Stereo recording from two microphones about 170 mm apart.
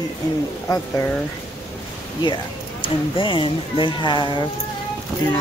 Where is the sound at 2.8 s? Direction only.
30° left (ahead or behind).